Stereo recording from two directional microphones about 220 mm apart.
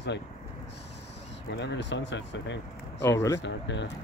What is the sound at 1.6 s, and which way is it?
Speech, 50° left (ahead or behind).